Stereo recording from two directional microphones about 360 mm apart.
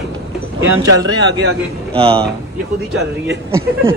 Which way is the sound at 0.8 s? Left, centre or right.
Right.